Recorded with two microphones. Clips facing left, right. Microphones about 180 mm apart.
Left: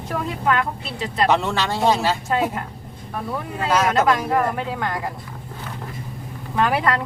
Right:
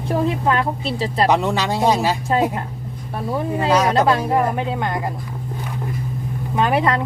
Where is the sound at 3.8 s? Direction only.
30° right (ahead or behind).